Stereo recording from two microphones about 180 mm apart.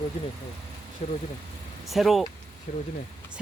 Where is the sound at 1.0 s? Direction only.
40° left (ahead or behind).